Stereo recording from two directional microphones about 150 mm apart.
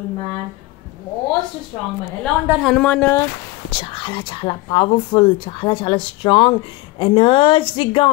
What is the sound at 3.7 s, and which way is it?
Speech, 35° left (ahead or behind).